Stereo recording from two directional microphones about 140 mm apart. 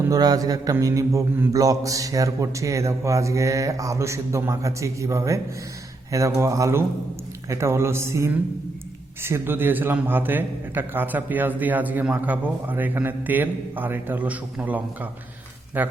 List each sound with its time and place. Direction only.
0.0 s mantra: 25° right (ahead or behind)
9.2 s a man's voice: 15° right (ahead or behind)